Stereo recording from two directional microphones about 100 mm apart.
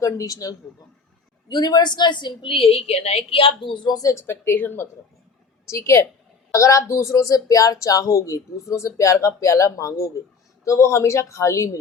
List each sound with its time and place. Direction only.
0.0 s a woman's voice: 35° left (ahead or behind)